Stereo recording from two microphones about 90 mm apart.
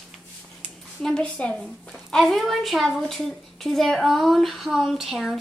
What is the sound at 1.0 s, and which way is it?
Speech, 10° left (ahead or behind).